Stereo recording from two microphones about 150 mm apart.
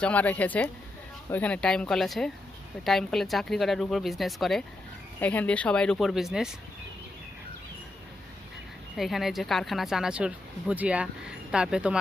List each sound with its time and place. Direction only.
0.0 s a woman's voice: 10° left (ahead or behind)
9.0 s speech: centre (ahead or behind)